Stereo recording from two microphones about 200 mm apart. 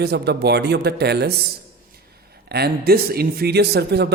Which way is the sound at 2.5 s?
55° right (ahead or behind).